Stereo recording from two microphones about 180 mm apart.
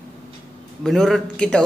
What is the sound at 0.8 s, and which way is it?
Speech, centre (ahead or behind).